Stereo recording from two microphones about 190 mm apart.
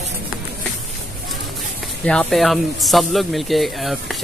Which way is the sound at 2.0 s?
Centre (ahead or behind).